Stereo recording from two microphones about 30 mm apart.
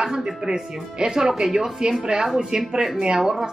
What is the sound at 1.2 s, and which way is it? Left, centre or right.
A woman's voice, centre.